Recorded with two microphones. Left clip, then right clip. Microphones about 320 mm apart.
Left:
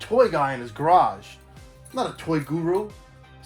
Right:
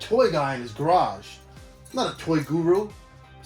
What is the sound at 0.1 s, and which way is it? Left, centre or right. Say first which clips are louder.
Speech: left 1 dB; left.